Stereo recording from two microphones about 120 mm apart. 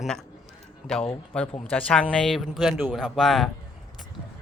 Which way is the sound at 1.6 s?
10° left (ahead or behind).